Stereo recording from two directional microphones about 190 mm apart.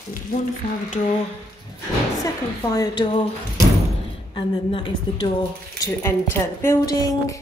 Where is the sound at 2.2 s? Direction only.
20° left (ahead or behind).